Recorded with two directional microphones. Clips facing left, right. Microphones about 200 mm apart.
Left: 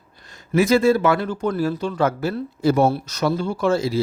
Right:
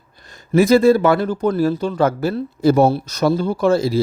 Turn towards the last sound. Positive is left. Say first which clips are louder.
# right 4 dB
turn(degrees=-35)  # may be behind; listen again after turning